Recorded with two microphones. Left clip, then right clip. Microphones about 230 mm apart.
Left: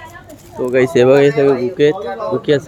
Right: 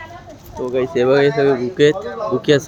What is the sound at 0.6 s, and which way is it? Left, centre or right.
Speech, left.